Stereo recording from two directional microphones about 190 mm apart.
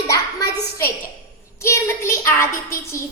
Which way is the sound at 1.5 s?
15° left (ahead or behind).